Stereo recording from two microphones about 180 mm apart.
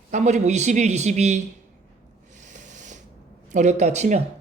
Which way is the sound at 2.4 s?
45° right (ahead or behind).